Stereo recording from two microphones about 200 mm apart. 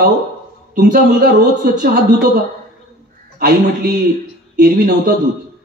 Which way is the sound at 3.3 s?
50° right (ahead or behind).